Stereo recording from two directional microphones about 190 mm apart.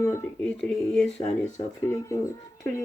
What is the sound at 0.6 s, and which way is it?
Speech, centre (ahead or behind).